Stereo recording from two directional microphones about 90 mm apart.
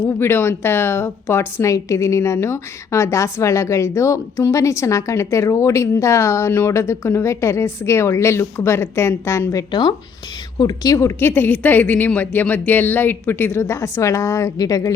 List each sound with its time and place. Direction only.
0.0 s speech: 25° left (ahead or behind)
10.6 s a woman's voice: 45° left (ahead or behind)
11.2 s a woman's voice: 20° left (ahead or behind); by 14.9 s 40° left (ahead or behind)